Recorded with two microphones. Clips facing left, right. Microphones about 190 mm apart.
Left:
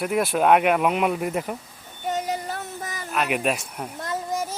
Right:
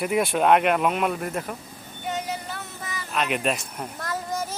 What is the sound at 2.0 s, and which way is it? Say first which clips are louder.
Child singing: left 3 dB; 40° left (ahead or behind).